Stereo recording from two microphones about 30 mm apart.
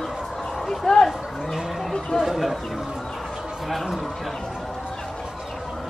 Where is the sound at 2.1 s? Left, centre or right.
Centre.